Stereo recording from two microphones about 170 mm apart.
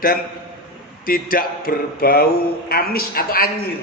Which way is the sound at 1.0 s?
55° left (ahead or behind).